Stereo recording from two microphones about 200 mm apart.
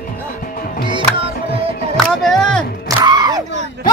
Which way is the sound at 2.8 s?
20° right (ahead or behind).